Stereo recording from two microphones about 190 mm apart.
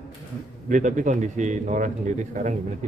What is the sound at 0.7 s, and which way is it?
A man's voice, 40° right (ahead or behind).